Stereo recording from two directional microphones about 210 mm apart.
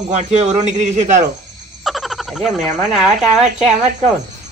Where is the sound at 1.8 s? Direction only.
Centre (ahead or behind).